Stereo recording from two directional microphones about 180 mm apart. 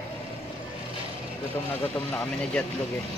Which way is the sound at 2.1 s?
5° left (ahead or behind).